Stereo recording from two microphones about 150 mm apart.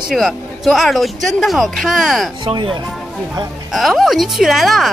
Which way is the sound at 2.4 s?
35° right (ahead or behind).